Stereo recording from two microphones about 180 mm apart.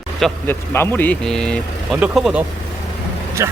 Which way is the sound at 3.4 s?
15° right (ahead or behind).